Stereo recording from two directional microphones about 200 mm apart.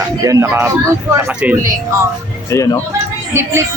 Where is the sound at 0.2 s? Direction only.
15° right (ahead or behind).